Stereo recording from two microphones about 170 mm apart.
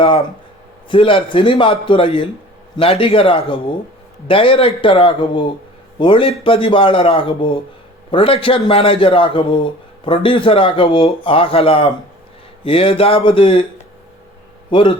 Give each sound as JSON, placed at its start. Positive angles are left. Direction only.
{"t": 0.9, "sound": "speech", "side_deg": 30}
{"t": 14.7, "sound": "a man's voice", "side_deg": 30}